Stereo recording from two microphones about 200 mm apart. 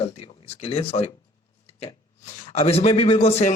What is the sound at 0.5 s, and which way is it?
Speech, 30° left (ahead or behind).